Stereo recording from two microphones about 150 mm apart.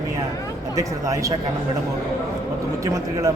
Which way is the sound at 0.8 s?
20° right (ahead or behind).